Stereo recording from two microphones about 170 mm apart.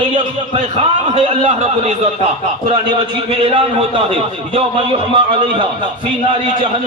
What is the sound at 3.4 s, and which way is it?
Speech, 35° right (ahead or behind).